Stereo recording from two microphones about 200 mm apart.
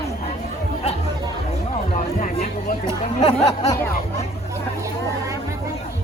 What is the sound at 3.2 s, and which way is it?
Speech, 15° left (ahead or behind).